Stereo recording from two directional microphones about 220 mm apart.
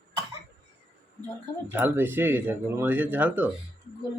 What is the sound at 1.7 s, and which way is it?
Speech, 10° right (ahead or behind).